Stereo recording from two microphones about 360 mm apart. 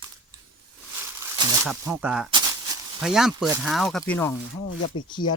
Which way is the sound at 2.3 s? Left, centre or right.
Centre.